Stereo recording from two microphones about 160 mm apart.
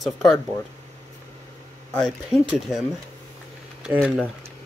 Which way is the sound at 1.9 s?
Centre (ahead or behind).